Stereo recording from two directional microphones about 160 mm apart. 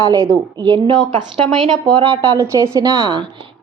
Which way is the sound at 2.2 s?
20° right (ahead or behind).